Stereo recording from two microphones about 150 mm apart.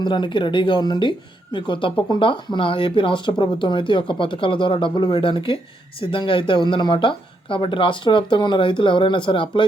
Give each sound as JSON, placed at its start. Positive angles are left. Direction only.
{"t": 0.0, "sound": "speech", "side_deg": 30}